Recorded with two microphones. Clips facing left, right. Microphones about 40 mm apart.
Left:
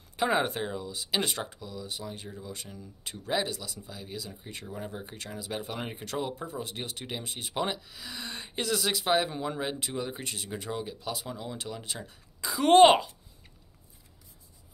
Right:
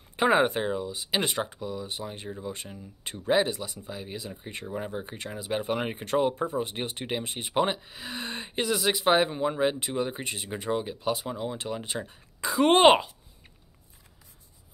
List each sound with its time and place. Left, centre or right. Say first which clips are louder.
0.1 s speech: right 5 dB; right
8.5 s speech: right 3 dB; centre